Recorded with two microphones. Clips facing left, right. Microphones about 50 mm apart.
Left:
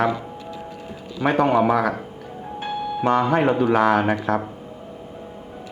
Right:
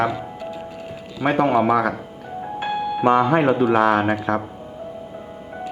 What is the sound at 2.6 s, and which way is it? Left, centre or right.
Music, right.